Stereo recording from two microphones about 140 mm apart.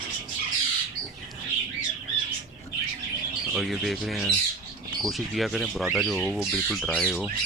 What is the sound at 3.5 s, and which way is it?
Speech, centre (ahead or behind).